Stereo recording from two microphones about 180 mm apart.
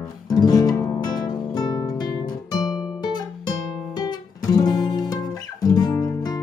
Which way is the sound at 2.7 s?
Centre (ahead or behind).